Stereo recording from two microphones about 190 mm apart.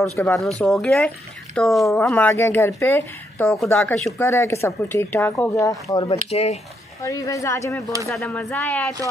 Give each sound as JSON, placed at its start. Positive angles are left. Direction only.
{"t": 0.2, "sound": "speech", "side_deg": 10}
{"t": 1.9, "sound": "speech", "side_deg": 10}
{"t": 6.3, "sound": "speech", "side_deg": 35}
{"t": 7.0, "sound": "speech", "side_deg": 15}
{"t": 8.5, "sound": "speech", "side_deg": 5}